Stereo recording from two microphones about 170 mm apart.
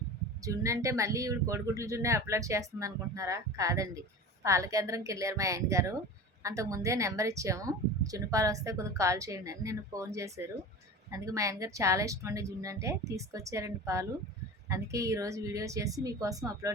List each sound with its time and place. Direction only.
0.4 s a woman's voice: 20° right (ahead or behind)